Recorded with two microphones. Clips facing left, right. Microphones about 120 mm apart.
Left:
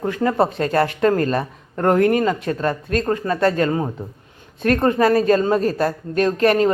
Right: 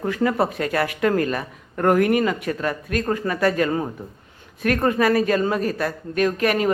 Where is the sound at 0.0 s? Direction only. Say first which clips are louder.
Left 2 dB; 25° left (ahead or behind).